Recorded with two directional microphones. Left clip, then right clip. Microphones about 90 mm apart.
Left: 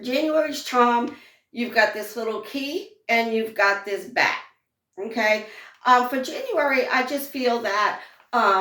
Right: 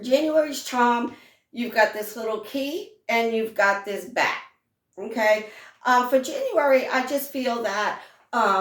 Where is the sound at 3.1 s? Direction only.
35° right (ahead or behind).